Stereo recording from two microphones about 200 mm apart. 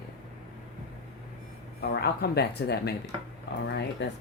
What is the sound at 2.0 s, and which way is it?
Speech, 55° left (ahead or behind).